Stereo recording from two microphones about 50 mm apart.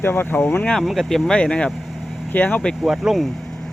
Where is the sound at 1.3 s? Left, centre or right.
Left.